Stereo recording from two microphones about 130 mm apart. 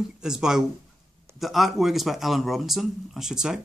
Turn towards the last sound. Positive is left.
turn(degrees=-5)  # may be behind; listen again after turning